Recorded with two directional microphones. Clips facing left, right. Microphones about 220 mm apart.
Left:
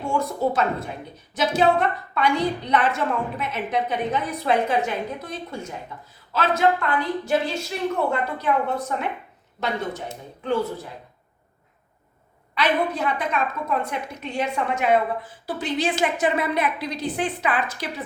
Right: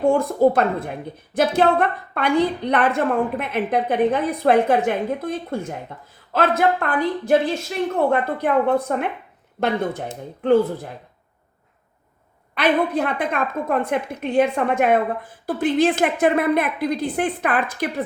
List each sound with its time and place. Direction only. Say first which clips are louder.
0.0 s a woman's voice: right 8 dB; 55° right (ahead or behind)
12.5 s a woman's voice: right 4 dB; 55° right (ahead or behind)